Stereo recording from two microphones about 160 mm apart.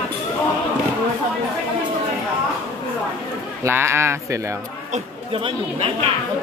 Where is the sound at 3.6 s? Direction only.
15° right (ahead or behind).